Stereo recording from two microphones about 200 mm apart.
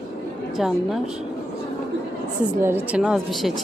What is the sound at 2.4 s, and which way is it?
A woman's voice, 10° right (ahead or behind).